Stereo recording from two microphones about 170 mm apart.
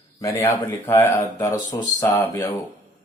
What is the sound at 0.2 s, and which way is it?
Speech, 20° left (ahead or behind).